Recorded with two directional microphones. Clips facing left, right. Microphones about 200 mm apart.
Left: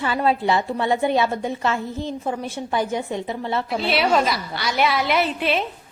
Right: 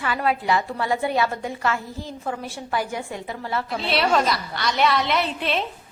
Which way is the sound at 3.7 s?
Centre (ahead or behind).